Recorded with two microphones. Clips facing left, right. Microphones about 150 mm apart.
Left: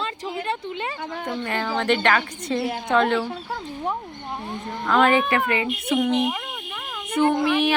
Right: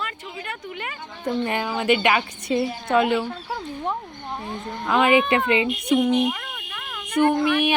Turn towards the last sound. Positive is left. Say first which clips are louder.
# even
turn(degrees=15)  # may be behind; listen again after turning